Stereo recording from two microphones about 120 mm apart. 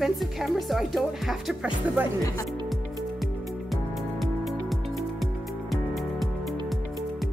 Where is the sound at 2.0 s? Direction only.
15° right (ahead or behind).